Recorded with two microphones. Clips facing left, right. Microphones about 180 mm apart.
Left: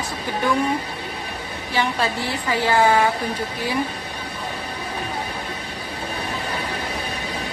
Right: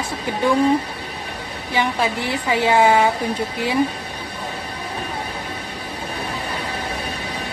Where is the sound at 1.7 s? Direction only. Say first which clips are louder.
Right 2 dB; 15° right (ahead or behind).